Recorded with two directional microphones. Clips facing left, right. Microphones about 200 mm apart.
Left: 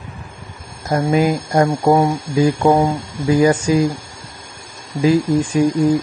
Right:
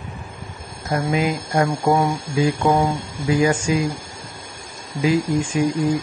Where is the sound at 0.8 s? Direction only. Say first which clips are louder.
Left 5 dB; 40° left (ahead or behind).